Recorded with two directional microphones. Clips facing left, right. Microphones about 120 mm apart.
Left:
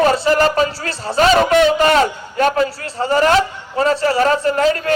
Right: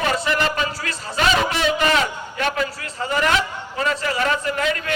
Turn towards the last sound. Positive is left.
turn(degrees=35)  # may be behind; listen again after turning